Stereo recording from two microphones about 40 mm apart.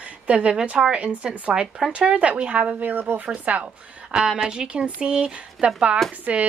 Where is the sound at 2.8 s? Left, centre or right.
Right.